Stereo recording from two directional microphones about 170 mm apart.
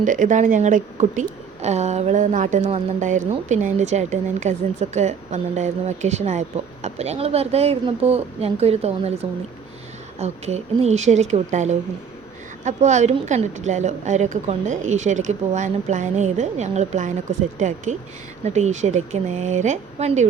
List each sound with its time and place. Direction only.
0.0 s a woman's voice: 50° right (ahead or behind)